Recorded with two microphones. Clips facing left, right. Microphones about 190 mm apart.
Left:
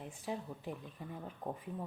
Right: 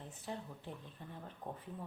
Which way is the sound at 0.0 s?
10° left (ahead or behind).